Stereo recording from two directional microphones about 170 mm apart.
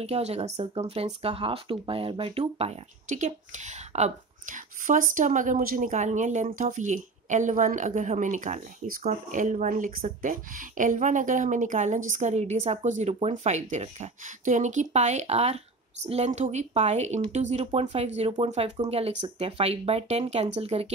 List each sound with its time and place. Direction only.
0.0 s speech: 40° right (ahead or behind)